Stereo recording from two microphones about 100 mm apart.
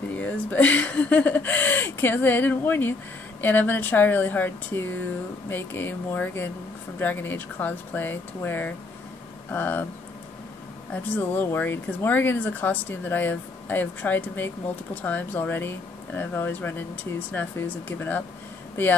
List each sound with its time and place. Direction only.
0.2 s speech: 15° left (ahead or behind)
11.0 s speech: 20° left (ahead or behind)